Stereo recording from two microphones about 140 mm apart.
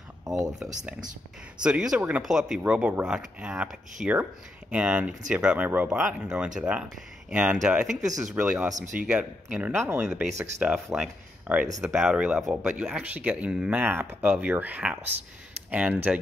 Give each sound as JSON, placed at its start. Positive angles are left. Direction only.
{"t": 1.6, "sound": "speech", "side_deg": -5}
{"t": 8.7, "sound": "speech", "side_deg": -60}
{"t": 9.0, "sound": "speech", "side_deg": -10}